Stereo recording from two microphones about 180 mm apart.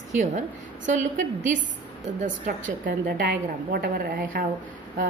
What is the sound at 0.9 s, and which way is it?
A woman's voice, 45° right (ahead or behind).